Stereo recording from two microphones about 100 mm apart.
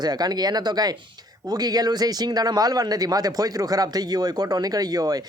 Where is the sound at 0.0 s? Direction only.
40° right (ahead or behind).